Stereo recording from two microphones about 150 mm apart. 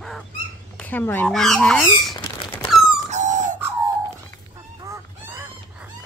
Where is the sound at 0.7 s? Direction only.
10° left (ahead or behind).